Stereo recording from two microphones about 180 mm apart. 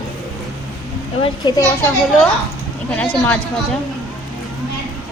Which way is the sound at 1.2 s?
25° left (ahead or behind).